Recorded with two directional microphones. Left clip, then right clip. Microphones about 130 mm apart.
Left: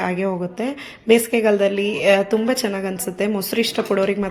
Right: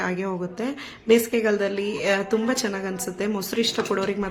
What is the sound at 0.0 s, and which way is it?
A woman's voice, 20° left (ahead or behind).